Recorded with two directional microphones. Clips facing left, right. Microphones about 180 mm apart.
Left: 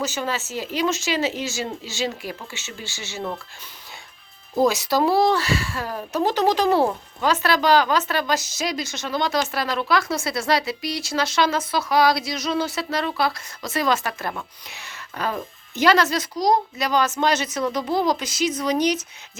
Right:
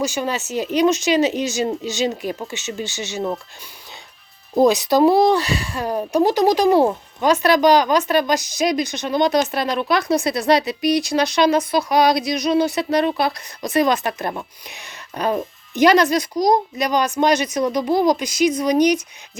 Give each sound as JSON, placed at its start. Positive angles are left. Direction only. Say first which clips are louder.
{"t": 0.0, "sound": "speech", "louder": "right 4 dB", "side_deg": -15}
{"t": 4.5, "sound": "speech", "louder": "right 5 dB", "side_deg": -20}